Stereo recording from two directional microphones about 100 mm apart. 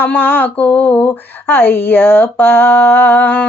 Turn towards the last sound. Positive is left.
turn(degrees=20)  # may be behind; listen again after turning